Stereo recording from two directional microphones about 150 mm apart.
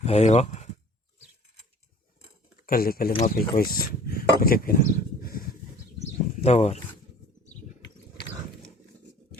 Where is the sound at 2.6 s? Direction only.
75° left (ahead or behind).